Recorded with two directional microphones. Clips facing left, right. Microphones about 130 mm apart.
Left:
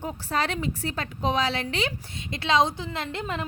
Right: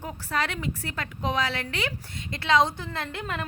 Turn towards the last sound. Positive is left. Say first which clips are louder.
# left 2 dB
turn(degrees=20)  # may be behind; listen again after turning